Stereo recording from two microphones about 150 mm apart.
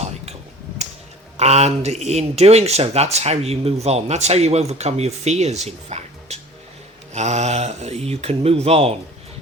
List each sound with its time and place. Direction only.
1.4 s speech: 45° right (ahead or behind)